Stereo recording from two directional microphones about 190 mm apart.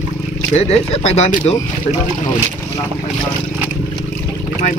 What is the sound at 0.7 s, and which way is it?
Speech, 35° left (ahead or behind).